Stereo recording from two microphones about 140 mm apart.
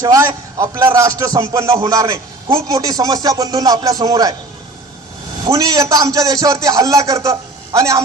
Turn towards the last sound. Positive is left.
turn(degrees=-25)  # may be behind; listen again after turning